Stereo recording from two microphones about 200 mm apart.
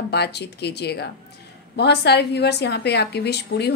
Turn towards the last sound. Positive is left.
turn(degrees=55)  # may be behind; listen again after turning